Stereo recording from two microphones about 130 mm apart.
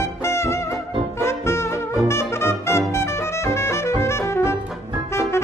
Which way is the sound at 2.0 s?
20° left (ahead or behind).